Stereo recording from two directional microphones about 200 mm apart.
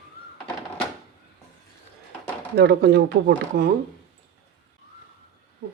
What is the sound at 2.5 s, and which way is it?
Speech, 55° right (ahead or behind).